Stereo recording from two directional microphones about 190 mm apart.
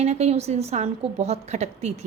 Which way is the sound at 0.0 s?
35° right (ahead or behind).